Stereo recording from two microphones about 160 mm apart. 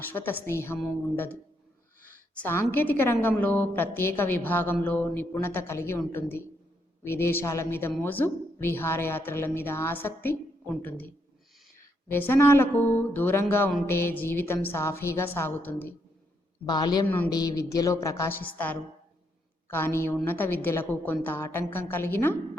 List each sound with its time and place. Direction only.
0.0 s a woman's voice: 10° left (ahead or behind)
12.1 s a woman's voice: 15° left (ahead or behind)
16.6 s music: 25° left (ahead or behind); by 18.8 s 10° left (ahead or behind)
19.7 s a woman's voice: 15° left (ahead or behind)